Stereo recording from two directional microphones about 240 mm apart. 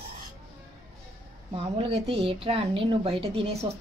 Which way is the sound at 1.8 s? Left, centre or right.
Right.